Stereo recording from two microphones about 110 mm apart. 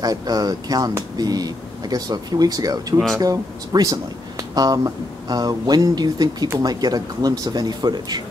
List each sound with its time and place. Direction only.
0.0 s speech: 35° right (ahead or behind)